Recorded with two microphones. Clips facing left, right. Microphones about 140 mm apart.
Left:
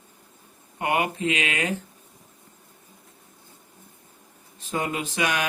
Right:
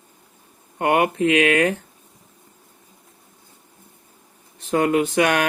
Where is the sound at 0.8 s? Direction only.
55° right (ahead or behind).